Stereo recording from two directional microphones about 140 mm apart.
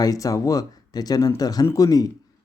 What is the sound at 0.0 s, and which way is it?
Speech, 25° left (ahead or behind).